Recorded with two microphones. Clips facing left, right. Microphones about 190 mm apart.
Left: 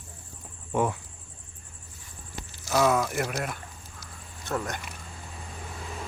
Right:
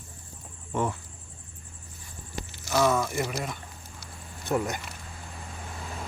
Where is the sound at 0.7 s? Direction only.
10° left (ahead or behind).